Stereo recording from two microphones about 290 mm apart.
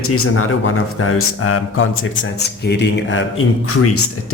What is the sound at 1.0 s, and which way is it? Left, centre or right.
Speech, left.